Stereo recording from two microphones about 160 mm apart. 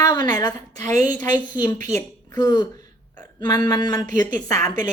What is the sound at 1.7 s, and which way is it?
Speech, 55° right (ahead or behind).